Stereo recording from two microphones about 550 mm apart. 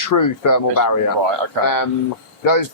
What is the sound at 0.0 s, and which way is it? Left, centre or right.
Speech, left.